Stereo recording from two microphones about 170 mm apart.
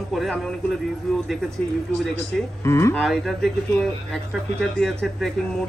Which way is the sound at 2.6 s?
15° left (ahead or behind).